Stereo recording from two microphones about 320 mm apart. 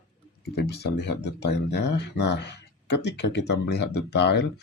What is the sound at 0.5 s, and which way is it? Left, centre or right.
Speech, left.